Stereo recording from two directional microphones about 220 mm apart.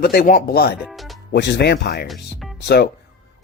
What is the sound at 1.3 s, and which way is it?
Speech, 50° left (ahead or behind).